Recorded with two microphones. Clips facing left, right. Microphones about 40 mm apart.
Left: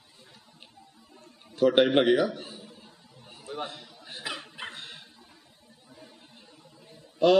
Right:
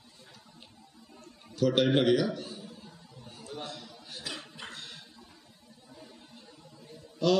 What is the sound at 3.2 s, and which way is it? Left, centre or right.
Dog, left.